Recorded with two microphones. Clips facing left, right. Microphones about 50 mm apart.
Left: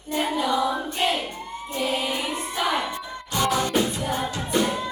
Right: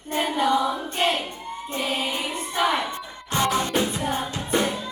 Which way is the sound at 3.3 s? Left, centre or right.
Right.